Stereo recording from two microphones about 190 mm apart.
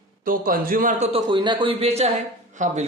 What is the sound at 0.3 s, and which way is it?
A man's voice, 50° right (ahead or behind).